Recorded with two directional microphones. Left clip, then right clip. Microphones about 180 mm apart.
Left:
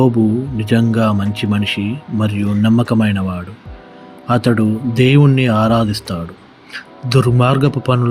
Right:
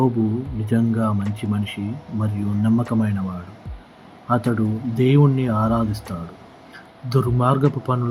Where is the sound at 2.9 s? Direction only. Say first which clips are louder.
Left 8 dB; 35° left (ahead or behind).